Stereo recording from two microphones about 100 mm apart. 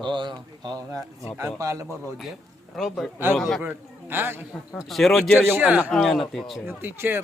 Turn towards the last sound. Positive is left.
turn(degrees=-20)  # may be behind; listen again after turning